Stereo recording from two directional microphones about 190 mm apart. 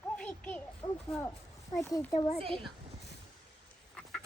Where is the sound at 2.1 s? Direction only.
35° left (ahead or behind).